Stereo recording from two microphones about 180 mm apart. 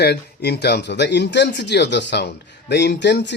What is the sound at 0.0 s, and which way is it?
Speech, 65° left (ahead or behind).